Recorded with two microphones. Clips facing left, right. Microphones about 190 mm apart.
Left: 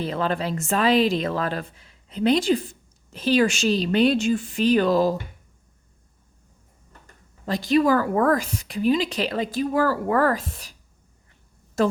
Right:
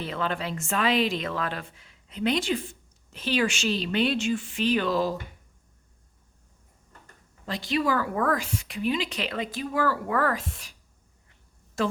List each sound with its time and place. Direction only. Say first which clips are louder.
0.0 s a woman's voice: left 5 dB; 40° left (ahead or behind)
7.4 s a woman's voice: left 7 dB; 45° left (ahead or behind)